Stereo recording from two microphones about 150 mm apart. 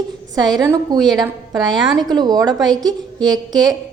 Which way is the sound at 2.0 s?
25° right (ahead or behind).